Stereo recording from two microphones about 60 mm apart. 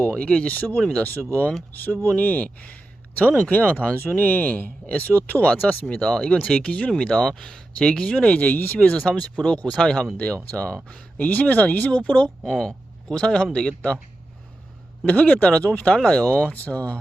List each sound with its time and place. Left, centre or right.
0.1 s speech: centre
9.5 s speech: centre
10.8 s speech: left
15.0 s speech: left